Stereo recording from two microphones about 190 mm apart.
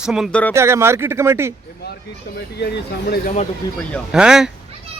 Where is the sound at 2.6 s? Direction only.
60° left (ahead or behind).